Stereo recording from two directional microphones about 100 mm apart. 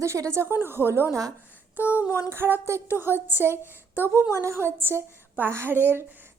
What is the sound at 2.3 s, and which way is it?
A woman's voice, 25° right (ahead or behind).